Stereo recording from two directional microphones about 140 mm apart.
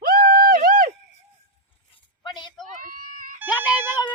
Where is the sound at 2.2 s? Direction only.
30° left (ahead or behind).